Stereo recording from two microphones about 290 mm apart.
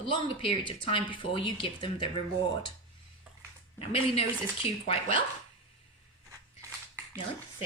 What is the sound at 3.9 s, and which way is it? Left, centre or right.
Speech, centre.